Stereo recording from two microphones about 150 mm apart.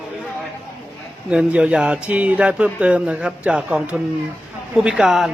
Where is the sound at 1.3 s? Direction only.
5° right (ahead or behind).